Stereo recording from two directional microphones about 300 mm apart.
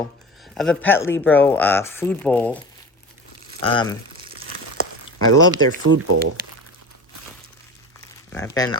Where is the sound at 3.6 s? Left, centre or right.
Centre.